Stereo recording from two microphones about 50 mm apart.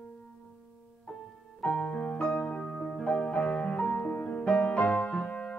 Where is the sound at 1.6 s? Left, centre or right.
Centre.